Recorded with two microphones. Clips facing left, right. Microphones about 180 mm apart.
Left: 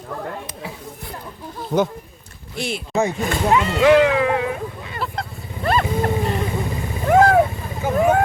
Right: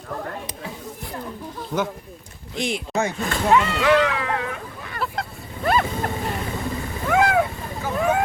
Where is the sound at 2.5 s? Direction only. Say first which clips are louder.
Right 1 dB; 20° right (ahead or behind).